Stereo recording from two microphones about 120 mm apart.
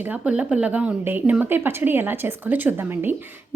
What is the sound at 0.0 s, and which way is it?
A woman's voice, 10° right (ahead or behind).